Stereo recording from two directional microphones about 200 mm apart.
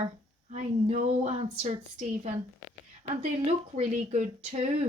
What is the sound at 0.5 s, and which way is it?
A woman's voice, 35° right (ahead or behind).